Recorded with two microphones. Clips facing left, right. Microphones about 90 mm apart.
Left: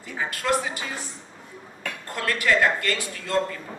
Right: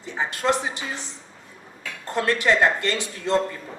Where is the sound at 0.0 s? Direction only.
25° right (ahead or behind).